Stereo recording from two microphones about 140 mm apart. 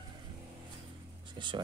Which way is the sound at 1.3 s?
35° right (ahead or behind).